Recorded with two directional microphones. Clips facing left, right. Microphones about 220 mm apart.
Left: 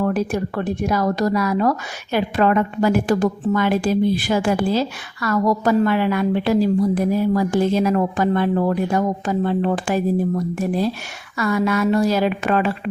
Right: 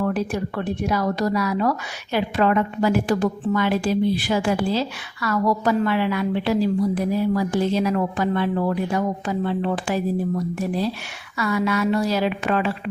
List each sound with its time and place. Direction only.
0.0 s a woman's voice: 45° left (ahead or behind)